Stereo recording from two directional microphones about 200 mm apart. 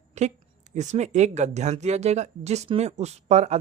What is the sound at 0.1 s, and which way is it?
A woman's voice, 35° right (ahead or behind).